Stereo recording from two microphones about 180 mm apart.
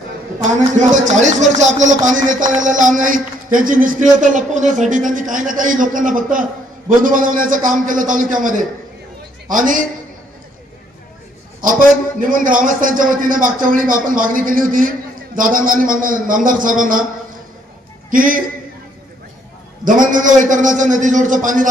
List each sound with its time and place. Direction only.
0.9 s speech: 40° right (ahead or behind)
12.2 s speech: 50° right (ahead or behind)
18.1 s speech: 50° right (ahead or behind)
19.8 s speech: 50° right (ahead or behind)